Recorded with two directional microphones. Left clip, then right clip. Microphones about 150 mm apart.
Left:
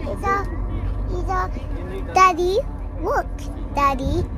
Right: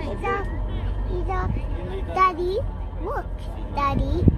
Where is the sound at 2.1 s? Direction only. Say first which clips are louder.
Left 5 dB; 55° left (ahead or behind).